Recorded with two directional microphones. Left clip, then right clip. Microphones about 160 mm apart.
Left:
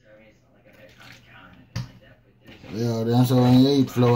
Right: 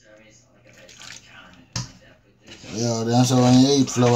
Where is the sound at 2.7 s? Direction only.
5° right (ahead or behind).